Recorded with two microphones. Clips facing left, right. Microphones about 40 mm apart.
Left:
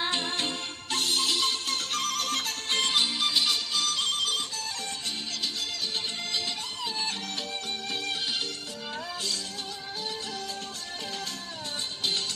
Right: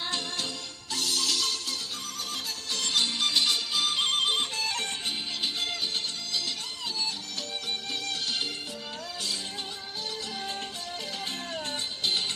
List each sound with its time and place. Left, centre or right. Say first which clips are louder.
0.0 s music: left 3 dB; left
1.9 s music: left 7 dB; left
3.2 s music: even; centre
3.8 s music: right 5 dB; right
4.6 s music: right 5 dB; right